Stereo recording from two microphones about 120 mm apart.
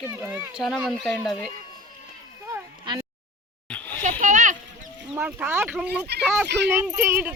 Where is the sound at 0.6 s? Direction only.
Centre (ahead or behind).